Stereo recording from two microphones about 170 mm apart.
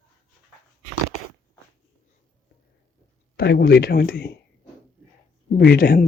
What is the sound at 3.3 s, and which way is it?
Speech, 70° left (ahead or behind).